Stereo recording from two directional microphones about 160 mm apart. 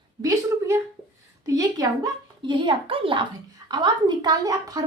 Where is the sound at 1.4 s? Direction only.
20° right (ahead or behind).